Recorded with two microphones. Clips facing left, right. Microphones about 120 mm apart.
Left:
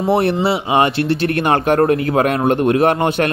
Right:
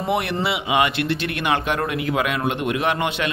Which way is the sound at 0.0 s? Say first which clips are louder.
Left 7 dB; 35° left (ahead or behind).